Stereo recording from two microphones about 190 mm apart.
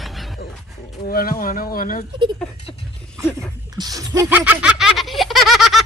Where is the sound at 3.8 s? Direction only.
20° right (ahead or behind); by 5.8 s centre (ahead or behind).